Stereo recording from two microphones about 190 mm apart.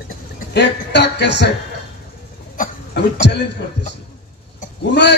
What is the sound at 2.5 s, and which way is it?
Cough, 50° left (ahead or behind).